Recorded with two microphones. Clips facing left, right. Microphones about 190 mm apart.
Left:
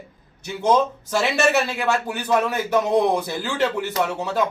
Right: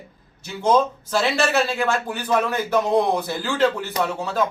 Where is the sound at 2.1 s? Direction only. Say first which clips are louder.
Left 1 dB; 15° left (ahead or behind).